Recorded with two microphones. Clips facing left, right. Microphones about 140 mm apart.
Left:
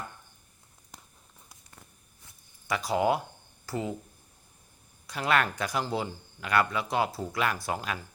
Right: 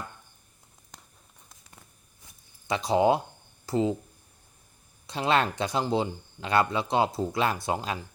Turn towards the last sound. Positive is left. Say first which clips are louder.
# right 3 dB
turn(degrees=-25)  # may be behind; listen again after turning